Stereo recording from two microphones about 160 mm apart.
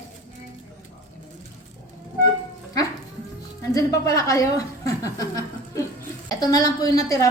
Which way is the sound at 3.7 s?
20° left (ahead or behind).